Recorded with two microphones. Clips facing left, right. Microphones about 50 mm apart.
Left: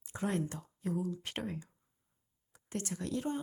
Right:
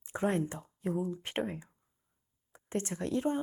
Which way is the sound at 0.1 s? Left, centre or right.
Right.